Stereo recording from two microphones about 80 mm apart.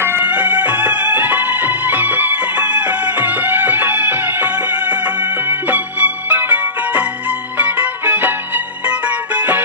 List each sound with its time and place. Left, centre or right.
0.0 s music: right